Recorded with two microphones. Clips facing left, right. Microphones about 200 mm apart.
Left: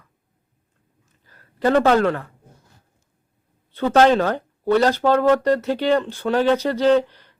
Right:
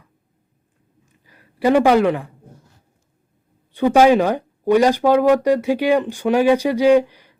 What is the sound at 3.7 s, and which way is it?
Speech, 15° right (ahead or behind).